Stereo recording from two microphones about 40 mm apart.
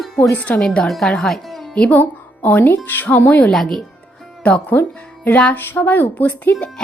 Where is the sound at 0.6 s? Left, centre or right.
Left.